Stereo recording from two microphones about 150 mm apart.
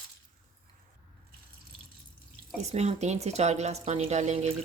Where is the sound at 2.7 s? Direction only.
45° right (ahead or behind).